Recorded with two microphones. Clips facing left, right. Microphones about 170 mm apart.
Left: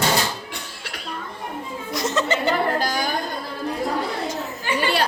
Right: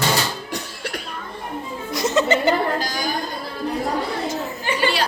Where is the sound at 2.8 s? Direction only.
55° left (ahead or behind).